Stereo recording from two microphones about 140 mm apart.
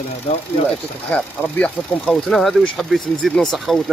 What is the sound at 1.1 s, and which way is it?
Speech, 5° left (ahead or behind).